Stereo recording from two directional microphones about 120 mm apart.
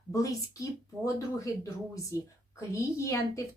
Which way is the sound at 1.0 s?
25° left (ahead or behind).